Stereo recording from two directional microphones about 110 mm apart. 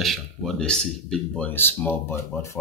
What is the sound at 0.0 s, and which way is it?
Speech, centre (ahead or behind).